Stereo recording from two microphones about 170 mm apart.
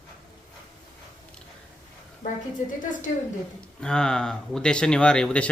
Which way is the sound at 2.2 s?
50° left (ahead or behind).